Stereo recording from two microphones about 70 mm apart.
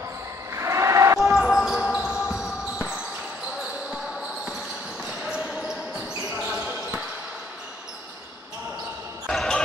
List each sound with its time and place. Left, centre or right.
0.6 s a sound: right
1.2 s basketball bounce: centre
9.3 s basketball bounce: centre